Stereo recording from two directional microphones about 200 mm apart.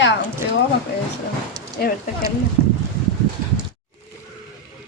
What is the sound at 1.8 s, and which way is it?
Speech, 50° left (ahead or behind).